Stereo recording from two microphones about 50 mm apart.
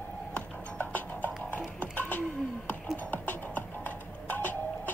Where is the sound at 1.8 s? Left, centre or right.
Left.